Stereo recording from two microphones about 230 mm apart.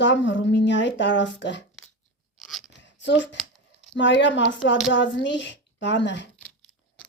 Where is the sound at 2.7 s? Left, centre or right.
Left.